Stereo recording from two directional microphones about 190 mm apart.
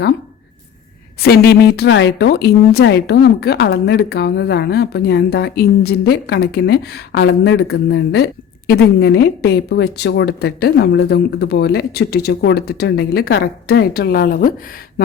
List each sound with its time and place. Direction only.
1.2 s a woman's voice: 55° left (ahead or behind)